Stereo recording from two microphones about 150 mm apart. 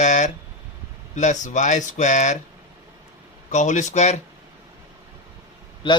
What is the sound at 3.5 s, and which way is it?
Speech, 55° left (ahead or behind).